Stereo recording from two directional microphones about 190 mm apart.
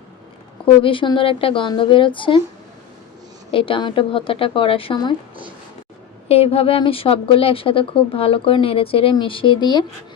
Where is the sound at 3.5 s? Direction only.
25° left (ahead or behind).